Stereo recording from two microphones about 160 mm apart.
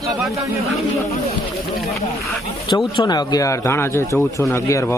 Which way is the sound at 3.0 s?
25° left (ahead or behind).